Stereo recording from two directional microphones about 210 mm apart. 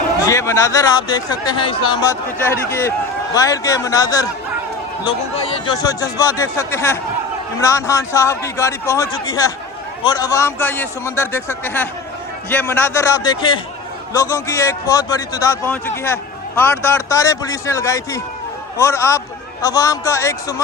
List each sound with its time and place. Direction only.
0.3 s a man's voice: 15° left (ahead or behind)